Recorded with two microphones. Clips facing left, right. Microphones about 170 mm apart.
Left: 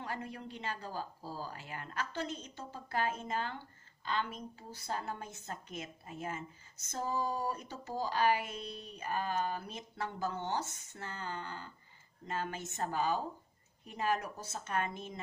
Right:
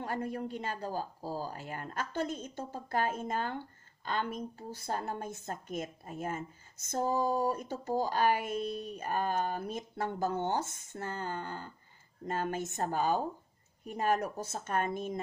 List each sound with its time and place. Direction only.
0.0 s speech: 50° right (ahead or behind)